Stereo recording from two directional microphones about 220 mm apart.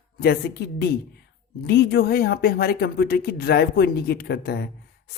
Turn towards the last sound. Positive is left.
turn(degrees=45)  # may be behind; listen again after turning